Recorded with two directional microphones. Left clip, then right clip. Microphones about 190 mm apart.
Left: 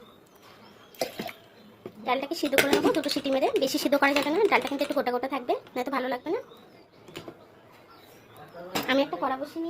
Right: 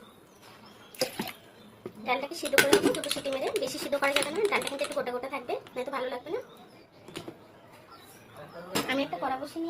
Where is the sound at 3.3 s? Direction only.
50° left (ahead or behind).